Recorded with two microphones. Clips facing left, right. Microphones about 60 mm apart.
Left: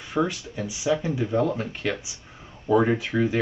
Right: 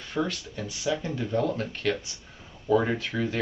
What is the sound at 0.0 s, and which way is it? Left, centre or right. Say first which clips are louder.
Speech: left 4 dB; centre.